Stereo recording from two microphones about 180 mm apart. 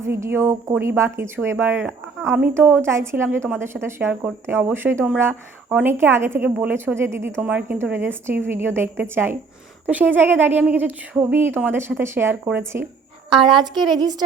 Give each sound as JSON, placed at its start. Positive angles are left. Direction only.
{"t": 0.0, "sound": "speech", "side_deg": -15}
{"t": 13.3, "sound": "a woman's voice", "side_deg": -25}
{"t": 13.6, "sound": "a woman's voice", "side_deg": 0}